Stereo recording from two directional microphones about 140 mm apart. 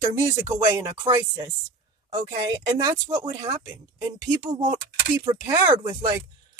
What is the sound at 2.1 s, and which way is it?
Speech, 30° right (ahead or behind).